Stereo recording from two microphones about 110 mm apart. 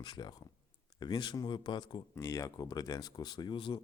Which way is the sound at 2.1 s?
30° left (ahead or behind).